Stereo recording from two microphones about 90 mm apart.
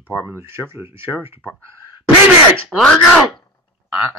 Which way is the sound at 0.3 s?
30° right (ahead or behind).